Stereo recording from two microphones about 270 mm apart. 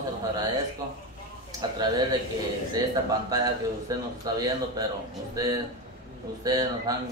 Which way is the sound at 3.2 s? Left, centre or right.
Centre.